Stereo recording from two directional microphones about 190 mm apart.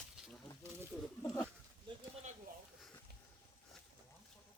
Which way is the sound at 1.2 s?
5° left (ahead or behind).